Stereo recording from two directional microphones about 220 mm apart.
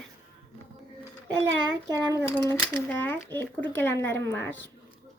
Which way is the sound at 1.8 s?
15° right (ahead or behind).